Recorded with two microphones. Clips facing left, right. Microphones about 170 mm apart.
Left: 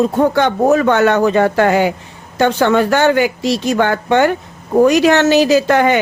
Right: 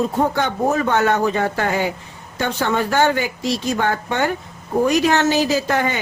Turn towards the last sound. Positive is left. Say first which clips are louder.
# left 8 dB
turn(degrees=75)  # may be behind; listen again after turning